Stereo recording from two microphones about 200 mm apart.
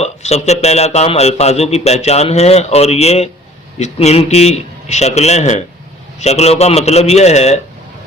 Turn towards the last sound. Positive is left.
turn(degrees=35)  # may be behind; listen again after turning